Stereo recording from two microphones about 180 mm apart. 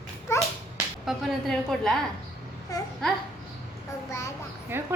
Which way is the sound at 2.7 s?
20° left (ahead or behind).